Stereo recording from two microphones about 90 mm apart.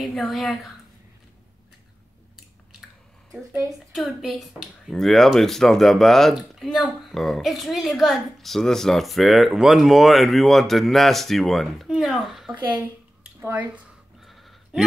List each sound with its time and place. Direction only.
0.0 s speech: centre (ahead or behind)
3.9 s speech: centre (ahead or behind)
12.6 s speech: 20° right (ahead or behind)
14.2 s a sound: centre (ahead or behind)